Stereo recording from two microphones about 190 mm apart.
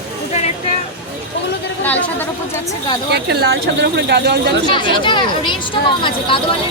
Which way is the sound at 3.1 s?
60° right (ahead or behind).